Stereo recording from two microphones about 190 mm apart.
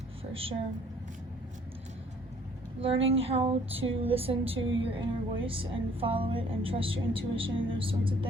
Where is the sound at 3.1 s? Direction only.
30° right (ahead or behind).